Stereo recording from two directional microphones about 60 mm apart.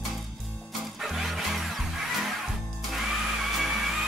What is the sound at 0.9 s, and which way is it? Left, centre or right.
Music, centre.